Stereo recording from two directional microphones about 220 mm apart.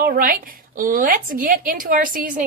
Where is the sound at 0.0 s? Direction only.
40° right (ahead or behind).